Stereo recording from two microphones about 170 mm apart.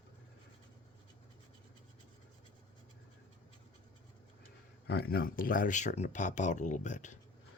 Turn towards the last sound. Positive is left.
turn(degrees=45)  # may be behind; listen again after turning